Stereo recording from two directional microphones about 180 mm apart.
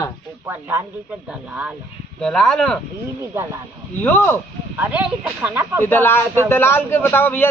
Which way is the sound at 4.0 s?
10° left (ahead or behind).